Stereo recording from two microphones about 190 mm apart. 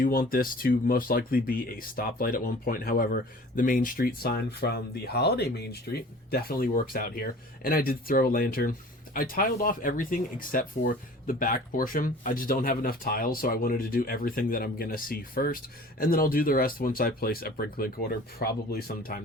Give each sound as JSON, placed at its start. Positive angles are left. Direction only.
{"t": 0.0, "sound": "speech", "side_deg": 50}